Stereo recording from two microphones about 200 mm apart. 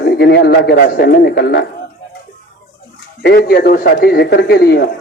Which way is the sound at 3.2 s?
55° left (ahead or behind).